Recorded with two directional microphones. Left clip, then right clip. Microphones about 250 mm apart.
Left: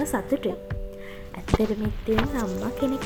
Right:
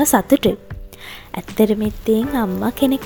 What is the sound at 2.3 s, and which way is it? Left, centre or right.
Speech, right.